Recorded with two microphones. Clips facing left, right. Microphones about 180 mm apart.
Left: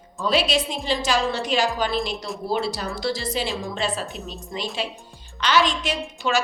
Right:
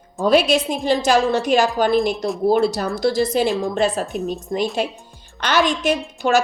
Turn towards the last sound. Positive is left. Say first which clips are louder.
# right 6 dB
turn(degrees=-45)  # may be behind; listen again after turning